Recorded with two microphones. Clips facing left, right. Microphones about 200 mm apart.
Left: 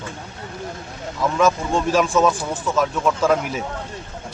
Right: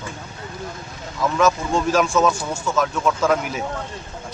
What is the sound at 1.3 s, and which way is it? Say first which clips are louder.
Speech: even; centre (ahead or behind).